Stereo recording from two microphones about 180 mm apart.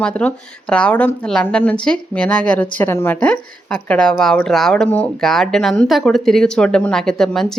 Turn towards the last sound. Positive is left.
turn(degrees=0)  # may be behind; listen again after turning